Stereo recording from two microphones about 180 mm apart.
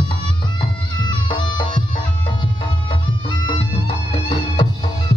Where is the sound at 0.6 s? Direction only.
25° left (ahead or behind).